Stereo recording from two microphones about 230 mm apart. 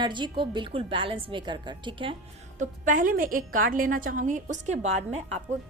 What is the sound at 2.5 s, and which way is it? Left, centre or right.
A woman's voice, right.